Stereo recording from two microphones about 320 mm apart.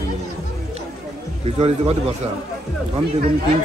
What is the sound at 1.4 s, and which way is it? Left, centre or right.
Speech, centre.